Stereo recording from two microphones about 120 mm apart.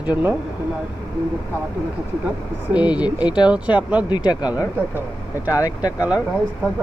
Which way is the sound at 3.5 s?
10° right (ahead or behind).